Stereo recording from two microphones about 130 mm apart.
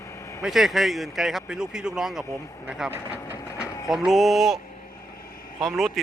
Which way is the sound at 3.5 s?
25° left (ahead or behind).